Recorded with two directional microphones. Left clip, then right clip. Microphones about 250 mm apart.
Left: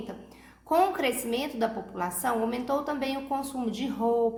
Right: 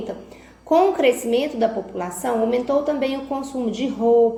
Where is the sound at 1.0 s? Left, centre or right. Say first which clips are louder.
Right 11 dB; left.